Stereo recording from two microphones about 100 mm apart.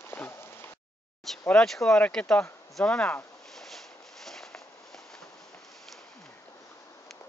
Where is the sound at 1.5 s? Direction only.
5° left (ahead or behind).